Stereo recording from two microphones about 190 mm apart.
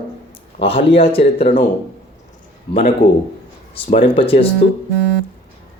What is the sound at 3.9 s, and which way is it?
Speech, 30° left (ahead or behind).